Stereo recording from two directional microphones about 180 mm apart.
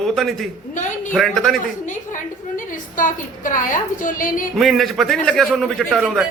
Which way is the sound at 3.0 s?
45° left (ahead or behind).